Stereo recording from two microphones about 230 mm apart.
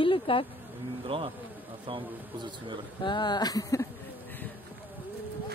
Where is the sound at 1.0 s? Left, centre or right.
Right.